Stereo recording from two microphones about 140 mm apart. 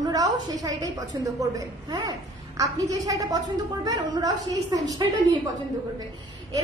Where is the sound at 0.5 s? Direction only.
25° right (ahead or behind).